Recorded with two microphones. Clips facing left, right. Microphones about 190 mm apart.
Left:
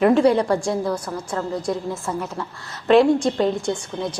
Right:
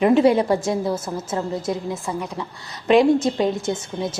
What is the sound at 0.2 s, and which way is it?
A woman's voice, 20° right (ahead or behind).